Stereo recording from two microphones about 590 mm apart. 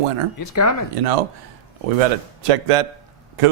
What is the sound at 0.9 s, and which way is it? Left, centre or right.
Speech, right.